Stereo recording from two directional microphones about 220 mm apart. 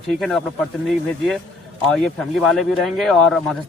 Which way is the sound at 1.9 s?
Centre (ahead or behind).